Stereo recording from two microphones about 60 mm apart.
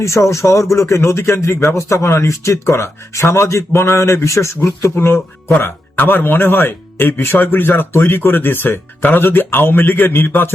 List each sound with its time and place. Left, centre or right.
0.0 s speech: left